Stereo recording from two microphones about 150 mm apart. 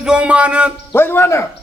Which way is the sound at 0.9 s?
15° left (ahead or behind).